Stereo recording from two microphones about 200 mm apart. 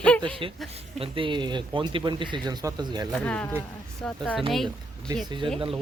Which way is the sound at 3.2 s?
5° left (ahead or behind).